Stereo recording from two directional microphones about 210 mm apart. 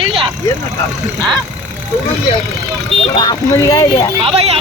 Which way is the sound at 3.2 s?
20° left (ahead or behind).